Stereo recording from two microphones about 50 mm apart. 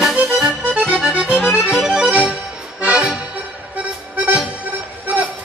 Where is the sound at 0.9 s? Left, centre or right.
Centre.